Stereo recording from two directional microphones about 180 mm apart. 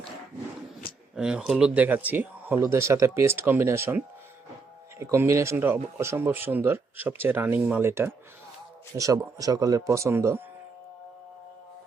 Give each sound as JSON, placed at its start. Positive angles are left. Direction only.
{"t": 1.1, "sound": "speech", "side_deg": -5}